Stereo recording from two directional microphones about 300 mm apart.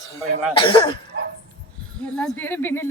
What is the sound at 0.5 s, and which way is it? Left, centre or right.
Speech, centre.